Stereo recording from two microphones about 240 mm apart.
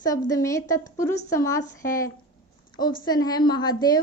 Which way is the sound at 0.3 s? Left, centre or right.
Centre.